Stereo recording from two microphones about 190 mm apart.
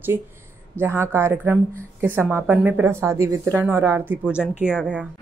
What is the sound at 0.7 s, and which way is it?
Speech, 15° right (ahead or behind).